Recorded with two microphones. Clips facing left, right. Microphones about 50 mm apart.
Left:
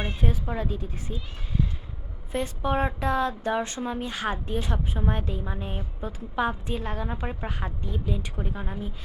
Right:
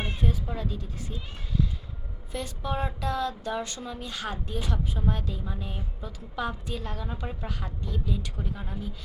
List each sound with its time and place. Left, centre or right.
0.2 s a woman's voice: left